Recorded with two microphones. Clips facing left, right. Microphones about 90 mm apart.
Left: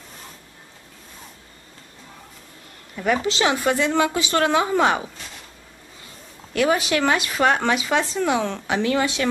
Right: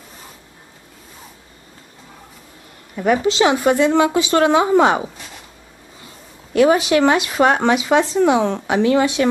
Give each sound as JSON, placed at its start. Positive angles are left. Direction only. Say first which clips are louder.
{"t": 3.0, "sound": "speech", "louder": "right 5 dB", "side_deg": -25}
{"t": 6.5, "sound": "speech", "louder": "right 6 dB", "side_deg": -25}